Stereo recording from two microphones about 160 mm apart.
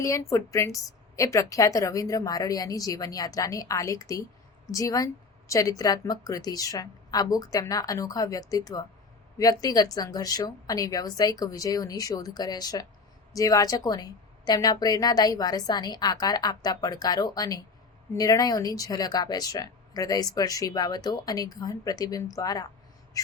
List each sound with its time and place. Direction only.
0.0 s a woman's voice: 20° left (ahead or behind)
23.1 s crow: 20° left (ahead or behind)